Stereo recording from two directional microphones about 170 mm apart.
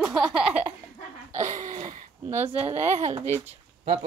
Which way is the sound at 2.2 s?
10° right (ahead or behind).